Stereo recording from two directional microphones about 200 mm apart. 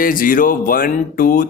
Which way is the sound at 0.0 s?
45° left (ahead or behind).